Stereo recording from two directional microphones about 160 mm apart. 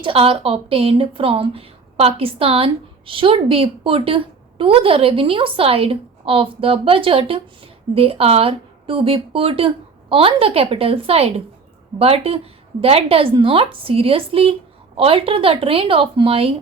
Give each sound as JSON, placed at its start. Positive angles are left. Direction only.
{"t": 0.0, "sound": "a woman's voice", "side_deg": -35}